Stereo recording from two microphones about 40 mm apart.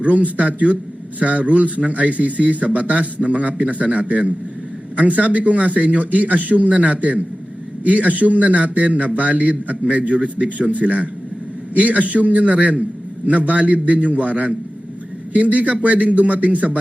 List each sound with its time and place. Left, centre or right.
0.0 s a man's voice: right